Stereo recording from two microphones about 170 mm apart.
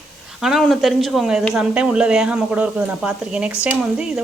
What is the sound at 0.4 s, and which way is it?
Speech, centre (ahead or behind).